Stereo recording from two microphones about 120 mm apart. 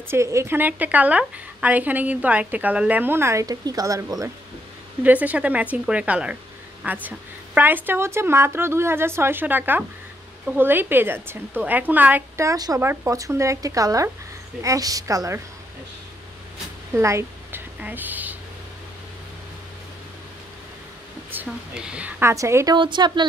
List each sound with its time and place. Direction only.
0.1 s a woman's voice: 25° right (ahead or behind)
5.0 s a woman's voice: 15° right (ahead or behind)
12.4 s speech: 30° right (ahead or behind)
16.9 s a sound: 25° right (ahead or behind)
21.3 s a woman's voice: 10° right (ahead or behind)
22.2 s speech: 25° right (ahead or behind)
22.8 s speech: 40° right (ahead or behind)